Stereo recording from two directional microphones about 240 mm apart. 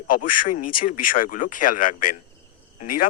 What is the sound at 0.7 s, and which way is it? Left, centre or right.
Speech, left.